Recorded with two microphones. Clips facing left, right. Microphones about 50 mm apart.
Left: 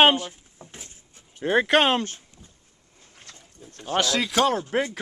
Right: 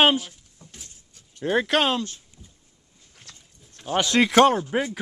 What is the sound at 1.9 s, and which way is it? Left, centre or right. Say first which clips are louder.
Speech: left 2 dB; left.